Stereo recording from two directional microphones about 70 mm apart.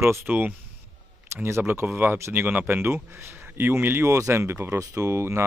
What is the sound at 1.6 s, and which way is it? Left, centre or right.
Speech, right.